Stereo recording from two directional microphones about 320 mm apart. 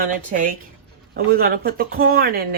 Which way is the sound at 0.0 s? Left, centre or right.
Right.